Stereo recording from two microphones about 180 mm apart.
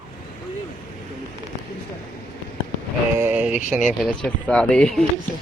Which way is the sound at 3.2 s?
10° right (ahead or behind).